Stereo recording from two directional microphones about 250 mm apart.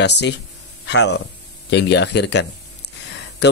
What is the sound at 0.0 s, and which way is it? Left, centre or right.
Speech, left.